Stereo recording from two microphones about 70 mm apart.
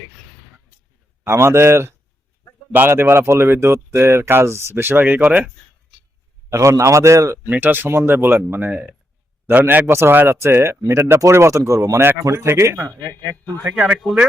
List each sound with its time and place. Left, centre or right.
1.2 s speech: right
6.5 s a man's voice: right
7.5 s a man's voice: right
9.8 s a man's voice: right
13.7 s a man's voice: centre